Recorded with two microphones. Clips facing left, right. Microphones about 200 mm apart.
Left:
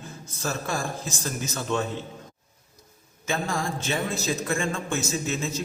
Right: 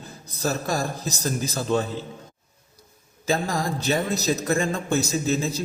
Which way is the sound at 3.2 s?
35° right (ahead or behind).